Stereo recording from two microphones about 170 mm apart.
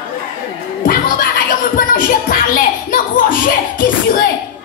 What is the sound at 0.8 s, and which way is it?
Music, 55° left (ahead or behind).